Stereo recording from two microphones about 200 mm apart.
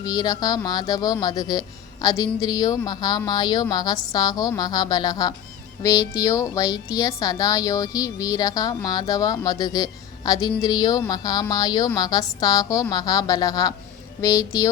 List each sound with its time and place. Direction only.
0.0 s a woman's voice: 20° left (ahead or behind)